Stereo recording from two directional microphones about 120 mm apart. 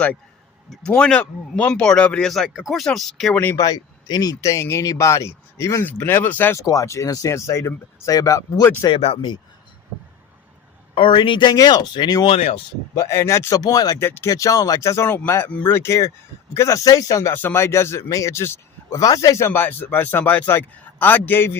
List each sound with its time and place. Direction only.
0.9 s speech: 5° left (ahead or behind)
3.3 s speech: 15° left (ahead or behind)
3.6 s speech: 35° left (ahead or behind); by 6.6 s 15° left (ahead or behind)
6.6 s speech: 25° left (ahead or behind)
8.9 s speech: 55° left (ahead or behind)
9.1 s speech: 40° left (ahead or behind)
10.9 s speech: 45° left (ahead or behind)
12.3 s speech: 60° left (ahead or behind)
13.0 s speech: 20° left (ahead or behind)
14.0 s speech: 20° left (ahead or behind)